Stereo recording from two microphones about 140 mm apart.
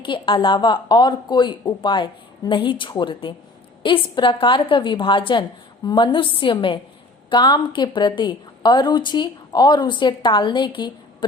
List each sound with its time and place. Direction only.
0.0 s a woman's voice: 35° left (ahead or behind)